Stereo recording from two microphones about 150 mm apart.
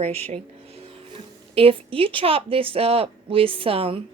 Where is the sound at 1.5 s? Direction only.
40° right (ahead or behind).